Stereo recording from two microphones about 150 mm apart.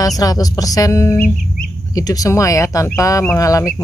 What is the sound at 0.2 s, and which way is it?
Speech, 25° left (ahead or behind).